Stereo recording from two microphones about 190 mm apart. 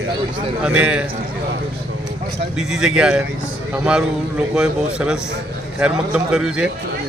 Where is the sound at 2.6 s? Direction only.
Centre (ahead or behind).